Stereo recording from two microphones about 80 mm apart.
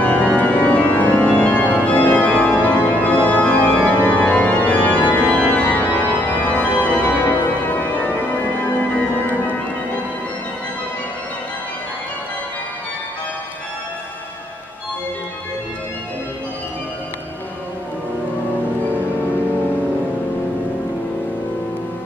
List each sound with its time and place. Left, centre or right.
0.0 s organ: centre